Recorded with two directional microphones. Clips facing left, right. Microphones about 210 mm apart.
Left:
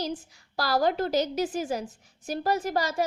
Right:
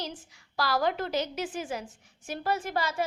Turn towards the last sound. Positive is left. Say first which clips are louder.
# left 3 dB
turn(degrees=40)  # may be behind; listen again after turning